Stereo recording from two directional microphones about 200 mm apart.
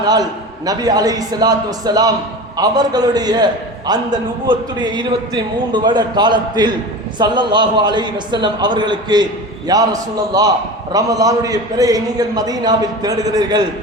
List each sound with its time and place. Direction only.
0.1 s a man's voice: 20° right (ahead or behind)